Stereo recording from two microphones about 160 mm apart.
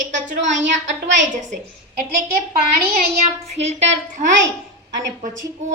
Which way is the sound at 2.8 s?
75° right (ahead or behind).